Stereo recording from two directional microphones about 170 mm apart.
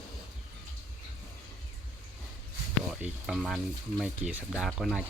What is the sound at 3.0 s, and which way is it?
Speech, centre (ahead or behind).